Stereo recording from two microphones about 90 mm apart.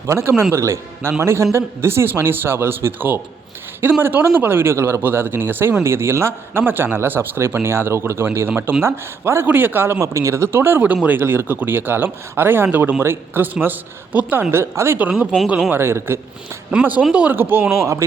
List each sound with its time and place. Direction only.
0.1 s a man's voice: 30° right (ahead or behind)
14.5 s speech: 30° right (ahead or behind)
16.7 s speech: 15° right (ahead or behind)